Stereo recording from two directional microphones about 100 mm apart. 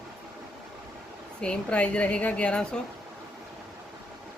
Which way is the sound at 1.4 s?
10° left (ahead or behind).